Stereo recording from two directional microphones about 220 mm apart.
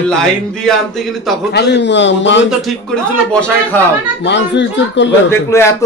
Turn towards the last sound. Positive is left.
turn(degrees=10)  # may be behind; listen again after turning